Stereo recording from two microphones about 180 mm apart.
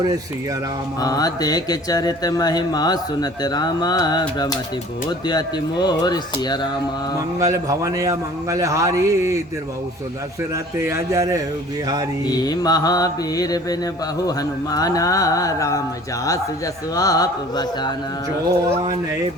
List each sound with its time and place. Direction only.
1.0 s speech: 20° left (ahead or behind)
7.3 s a man's voice: 15° right (ahead or behind)
10.5 s a man's voice: 15° right (ahead or behind)
12.2 s speech: 20° left (ahead or behind)
16.9 s speech: 20° left (ahead or behind)